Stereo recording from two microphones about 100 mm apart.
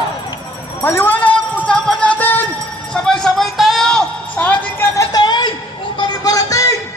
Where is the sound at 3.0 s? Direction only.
5° left (ahead or behind).